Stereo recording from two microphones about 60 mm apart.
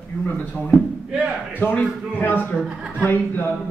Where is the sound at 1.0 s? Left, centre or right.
Centre.